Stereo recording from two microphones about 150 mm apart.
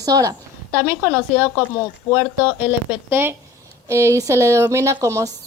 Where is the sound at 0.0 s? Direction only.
25° right (ahead or behind).